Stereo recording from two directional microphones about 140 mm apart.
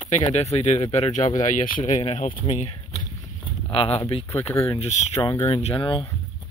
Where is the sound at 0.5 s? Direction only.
55° left (ahead or behind); by 6.1 s 35° left (ahead or behind).